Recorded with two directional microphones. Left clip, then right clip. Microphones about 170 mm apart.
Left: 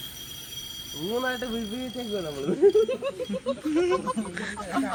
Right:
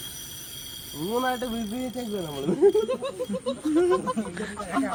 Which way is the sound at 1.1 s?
90° right.